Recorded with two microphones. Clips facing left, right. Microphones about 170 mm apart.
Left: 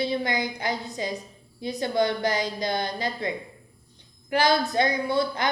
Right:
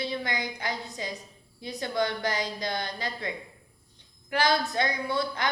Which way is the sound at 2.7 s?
45° left (ahead or behind).